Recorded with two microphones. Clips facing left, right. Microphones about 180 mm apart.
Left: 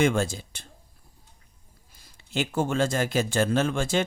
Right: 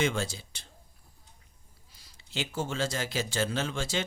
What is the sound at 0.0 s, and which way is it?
Speech, 50° left (ahead or behind).